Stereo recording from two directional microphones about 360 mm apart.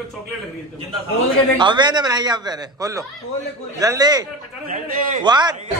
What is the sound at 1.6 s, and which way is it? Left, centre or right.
Speech, centre.